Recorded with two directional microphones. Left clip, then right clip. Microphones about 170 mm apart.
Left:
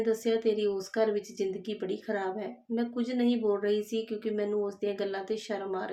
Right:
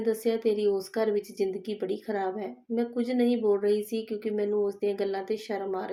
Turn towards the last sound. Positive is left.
turn(degrees=-5)  # may be behind; listen again after turning